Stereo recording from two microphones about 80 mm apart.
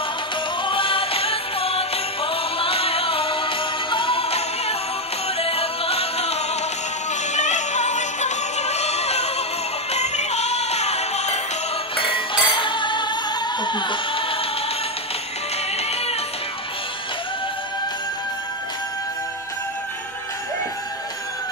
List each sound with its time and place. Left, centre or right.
0.7 s music: left
3.3 s music: left
12.0 s music: left